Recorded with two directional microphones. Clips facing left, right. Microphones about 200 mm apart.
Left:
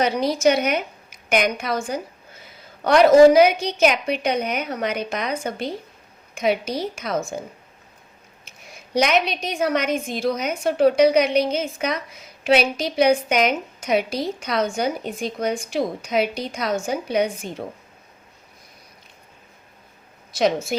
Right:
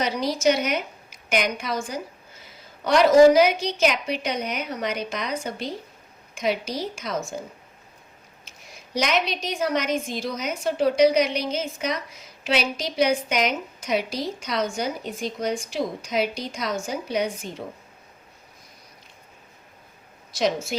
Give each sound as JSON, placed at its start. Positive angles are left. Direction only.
{"t": 0.0, "sound": "a woman's voice", "side_deg": 55}
{"t": 8.4, "sound": "a woman's voice", "side_deg": 55}
{"t": 20.3, "sound": "a woman's voice", "side_deg": 55}